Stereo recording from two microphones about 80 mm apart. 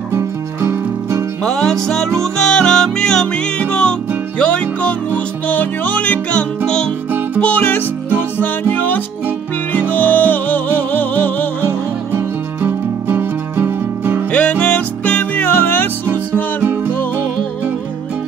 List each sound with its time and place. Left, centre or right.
0.1 s music: right
1.4 s music: centre
12.2 s music: right
14.3 s music: centre